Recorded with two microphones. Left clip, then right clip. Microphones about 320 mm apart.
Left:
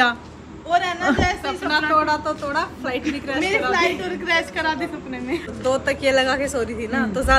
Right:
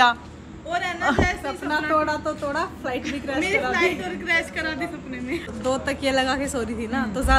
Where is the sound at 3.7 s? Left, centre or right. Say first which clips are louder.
Left 3 dB; centre.